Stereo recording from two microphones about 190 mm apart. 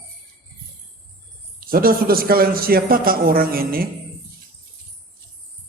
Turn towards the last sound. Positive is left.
turn(degrees=-50)  # may be behind; listen again after turning